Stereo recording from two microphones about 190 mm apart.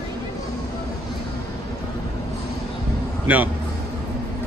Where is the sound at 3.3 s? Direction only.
10° right (ahead or behind).